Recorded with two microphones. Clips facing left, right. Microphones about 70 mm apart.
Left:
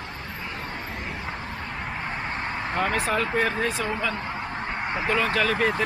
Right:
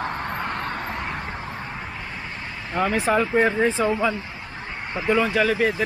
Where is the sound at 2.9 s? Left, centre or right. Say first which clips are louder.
Right 8 dB; centre.